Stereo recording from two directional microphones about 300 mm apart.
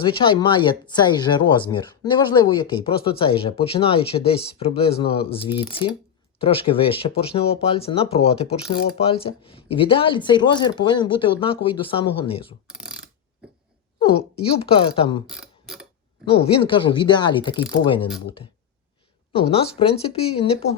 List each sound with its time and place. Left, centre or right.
0.0 s speech: centre
12.6 s mechanisms: centre
14.0 s speech: centre
15.3 s mechanisms: centre
16.2 s speech: centre
19.3 s speech: centre